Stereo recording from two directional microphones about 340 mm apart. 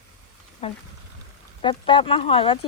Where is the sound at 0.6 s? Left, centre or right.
Centre.